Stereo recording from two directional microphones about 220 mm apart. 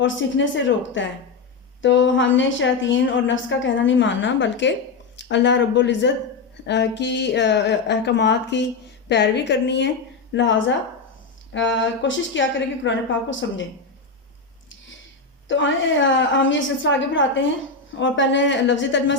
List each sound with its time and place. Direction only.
0.0 s a woman's voice: 55° left (ahead or behind)
15.4 s a woman's voice: 60° left (ahead or behind)